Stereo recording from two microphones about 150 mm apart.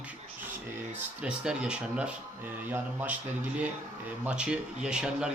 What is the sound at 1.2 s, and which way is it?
A man's voice, 5° right (ahead or behind).